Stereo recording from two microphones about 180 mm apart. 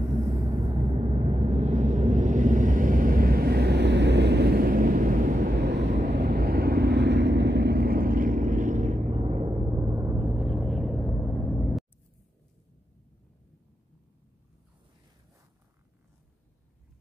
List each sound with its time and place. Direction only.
0.0 s a sound: 25° right (ahead or behind); by 5.6 s 45° right (ahead or behind)
5.6 s vehicle: 70° right (ahead or behind)
5.9 s vehicle: 45° right (ahead or behind)
6.1 s vehicle: 60° right (ahead or behind); by 9.5 s 35° right (ahead or behind)
9.5 s gong: 20° right (ahead or behind)
10.1 s vehicle: 5° right (ahead or behind)